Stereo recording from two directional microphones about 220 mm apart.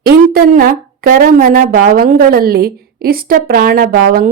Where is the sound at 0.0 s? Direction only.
40° right (ahead or behind).